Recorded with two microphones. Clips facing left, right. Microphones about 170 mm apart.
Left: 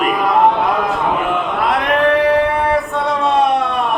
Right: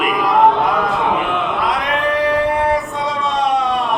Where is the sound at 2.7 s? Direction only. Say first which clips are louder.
Left 2 dB; 60° left (ahead or behind).